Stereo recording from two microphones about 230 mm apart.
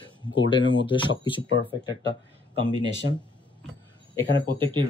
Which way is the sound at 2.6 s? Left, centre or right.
Right.